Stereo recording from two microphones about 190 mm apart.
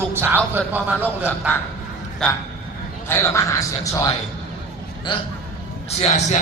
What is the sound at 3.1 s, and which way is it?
A man's voice, 15° left (ahead or behind).